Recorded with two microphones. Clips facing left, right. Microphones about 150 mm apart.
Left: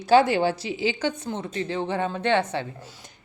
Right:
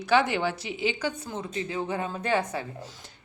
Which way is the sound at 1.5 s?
45° left (ahead or behind).